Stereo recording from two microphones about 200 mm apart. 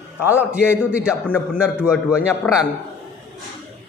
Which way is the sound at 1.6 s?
5° right (ahead or behind).